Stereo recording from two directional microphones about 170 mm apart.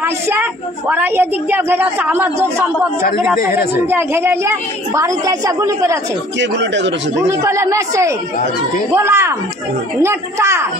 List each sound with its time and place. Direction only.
0.0 s a woman's voice: 10° right (ahead or behind)
6.4 s speech: 90° right
7.2 s a woman's voice: 15° right (ahead or behind)